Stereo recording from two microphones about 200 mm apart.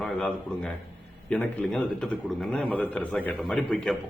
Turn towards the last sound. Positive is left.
turn(degrees=5)  # may be behind; listen again after turning